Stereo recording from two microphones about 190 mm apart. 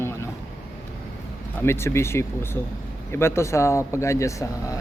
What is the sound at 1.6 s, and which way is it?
Speech, 15° left (ahead or behind).